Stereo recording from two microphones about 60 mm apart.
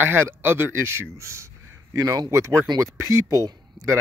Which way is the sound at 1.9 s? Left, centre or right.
Right.